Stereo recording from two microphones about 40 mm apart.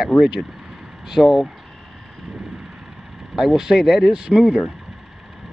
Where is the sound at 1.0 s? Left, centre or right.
Centre.